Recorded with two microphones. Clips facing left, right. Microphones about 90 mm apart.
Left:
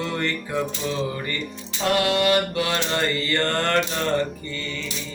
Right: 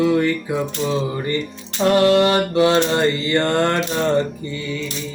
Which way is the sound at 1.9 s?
35° right (ahead or behind).